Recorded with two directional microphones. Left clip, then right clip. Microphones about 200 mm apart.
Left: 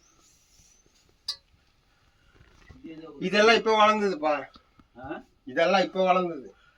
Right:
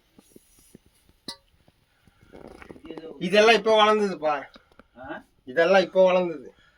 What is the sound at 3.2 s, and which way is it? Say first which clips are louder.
Speech: right 2 dB; 70° right (ahead or behind).